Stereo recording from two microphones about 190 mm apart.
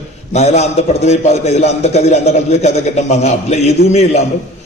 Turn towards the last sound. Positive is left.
turn(degrees=35)  # may be behind; listen again after turning